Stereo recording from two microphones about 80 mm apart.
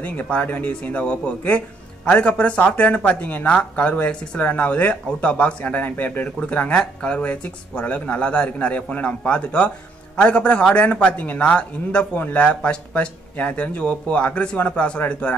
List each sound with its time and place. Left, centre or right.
0.0 s speech: centre